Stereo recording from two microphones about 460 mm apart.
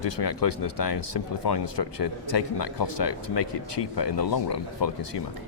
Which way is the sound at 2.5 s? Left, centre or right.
Left.